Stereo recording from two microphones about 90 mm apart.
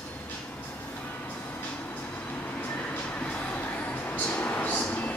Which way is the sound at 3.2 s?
15° left (ahead or behind).